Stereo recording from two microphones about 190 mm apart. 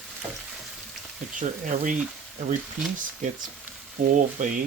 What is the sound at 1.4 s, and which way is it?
Speech, 45° right (ahead or behind).